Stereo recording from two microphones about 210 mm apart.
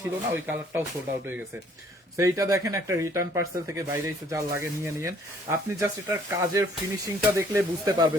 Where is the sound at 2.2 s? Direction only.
15° right (ahead or behind).